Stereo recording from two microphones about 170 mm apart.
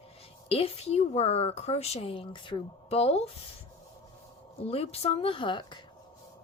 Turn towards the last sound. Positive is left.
turn(degrees=25)  # may be behind; listen again after turning